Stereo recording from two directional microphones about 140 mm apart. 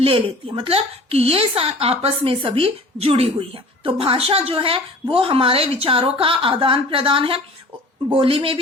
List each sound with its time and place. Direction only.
0.0 s a woman's voice: 40° right (ahead or behind)